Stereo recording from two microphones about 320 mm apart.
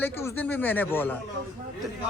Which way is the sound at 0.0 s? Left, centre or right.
Centre.